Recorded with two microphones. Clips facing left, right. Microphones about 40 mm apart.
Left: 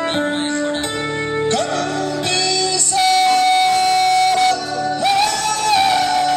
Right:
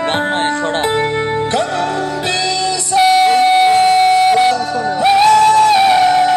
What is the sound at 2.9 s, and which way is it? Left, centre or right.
Music, centre.